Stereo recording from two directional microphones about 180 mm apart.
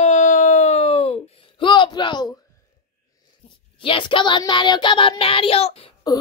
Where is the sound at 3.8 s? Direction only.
30° left (ahead or behind).